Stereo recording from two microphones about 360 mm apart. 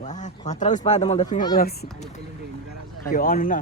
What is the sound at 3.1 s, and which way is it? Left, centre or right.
Speech, left.